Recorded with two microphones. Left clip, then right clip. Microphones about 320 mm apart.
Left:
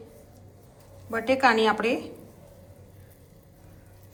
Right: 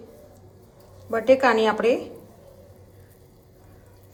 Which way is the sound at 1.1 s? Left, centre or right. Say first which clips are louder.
Right 4 dB; centre.